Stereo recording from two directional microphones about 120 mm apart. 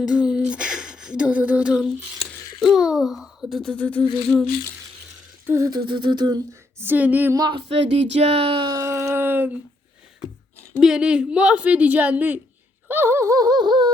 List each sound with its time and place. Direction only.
0.1 s a sound: 10° right (ahead or behind); by 4.0 s 10° left (ahead or behind)
5.5 s humming: 30° right (ahead or behind)
6.7 s a woman's voice: 15° right (ahead or behind)
7.3 s humming: 35° right (ahead or behind)
7.7 s speech: 60° right (ahead or behind)
8.7 s a sound: 25° right (ahead or behind)
10.8 s a woman's voice: 5° right (ahead or behind)
12.9 s humming: 20° right (ahead or behind); by 13.9 s 35° right (ahead or behind)